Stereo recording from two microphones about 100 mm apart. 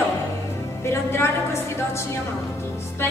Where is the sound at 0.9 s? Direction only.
25° left (ahead or behind).